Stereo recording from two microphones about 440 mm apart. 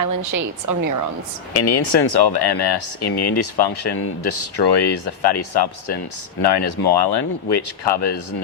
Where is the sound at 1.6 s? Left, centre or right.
Left.